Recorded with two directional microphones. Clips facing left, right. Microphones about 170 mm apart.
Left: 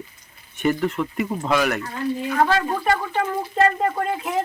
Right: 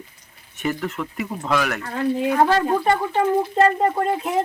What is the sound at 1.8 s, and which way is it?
Speech, 60° right (ahead or behind).